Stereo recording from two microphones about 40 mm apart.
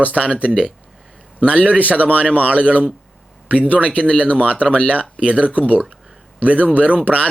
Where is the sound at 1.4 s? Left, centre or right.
Right.